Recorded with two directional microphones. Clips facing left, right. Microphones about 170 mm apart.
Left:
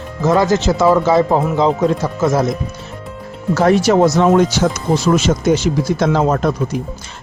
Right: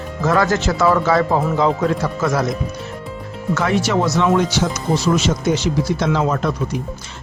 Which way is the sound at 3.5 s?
40° left (ahead or behind).